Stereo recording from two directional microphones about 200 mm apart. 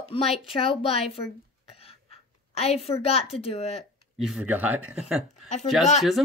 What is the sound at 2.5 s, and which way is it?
A child's voice, 30° left (ahead or behind).